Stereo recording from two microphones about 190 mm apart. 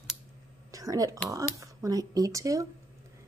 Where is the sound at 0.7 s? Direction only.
20° right (ahead or behind).